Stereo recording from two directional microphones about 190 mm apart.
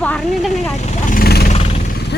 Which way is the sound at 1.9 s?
60° left (ahead or behind).